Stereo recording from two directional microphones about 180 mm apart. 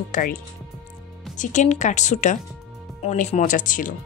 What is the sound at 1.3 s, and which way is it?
Speech, 45° left (ahead or behind).